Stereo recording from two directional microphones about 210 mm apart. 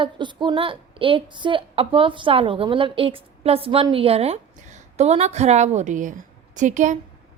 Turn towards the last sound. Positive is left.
turn(degrees=-35)  # may be behind; listen again after turning